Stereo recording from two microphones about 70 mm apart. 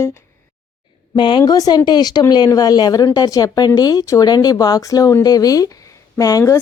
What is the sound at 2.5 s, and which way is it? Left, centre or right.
Speech, left.